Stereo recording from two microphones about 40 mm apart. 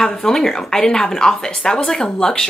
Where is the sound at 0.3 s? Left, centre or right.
Centre.